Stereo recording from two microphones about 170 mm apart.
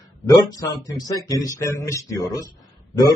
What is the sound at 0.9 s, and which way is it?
Speech, 20° left (ahead or behind).